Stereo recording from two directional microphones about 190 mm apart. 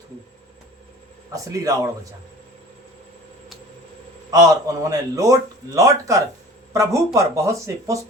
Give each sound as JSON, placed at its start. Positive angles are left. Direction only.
{"t": 1.3, "sound": "speech", "side_deg": -15}
{"t": 4.3, "sound": "speech", "side_deg": -20}